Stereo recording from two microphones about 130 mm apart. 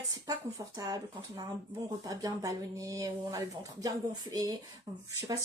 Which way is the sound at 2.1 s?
25° right (ahead or behind).